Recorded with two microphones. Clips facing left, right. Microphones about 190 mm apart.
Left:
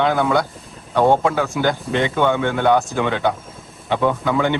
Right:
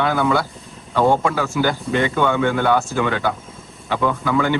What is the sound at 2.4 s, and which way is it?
Speech, centre (ahead or behind).